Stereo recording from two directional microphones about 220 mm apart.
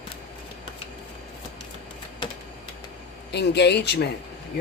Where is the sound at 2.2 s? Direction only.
20° left (ahead or behind).